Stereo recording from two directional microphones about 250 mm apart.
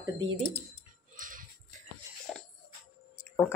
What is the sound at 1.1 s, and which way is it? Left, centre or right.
Music, right.